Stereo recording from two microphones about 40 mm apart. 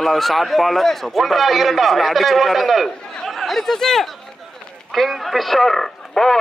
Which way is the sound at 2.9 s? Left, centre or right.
Centre.